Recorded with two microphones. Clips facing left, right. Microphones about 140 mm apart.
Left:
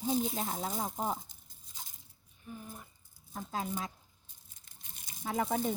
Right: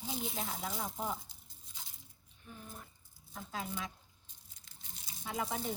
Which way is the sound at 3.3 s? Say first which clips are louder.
Left 5 dB; 45° left (ahead or behind).